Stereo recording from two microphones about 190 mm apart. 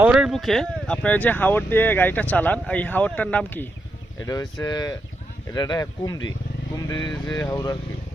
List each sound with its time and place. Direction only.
0.0 s speech: 5° right (ahead or behind)
4.2 s speech: 20° left (ahead or behind)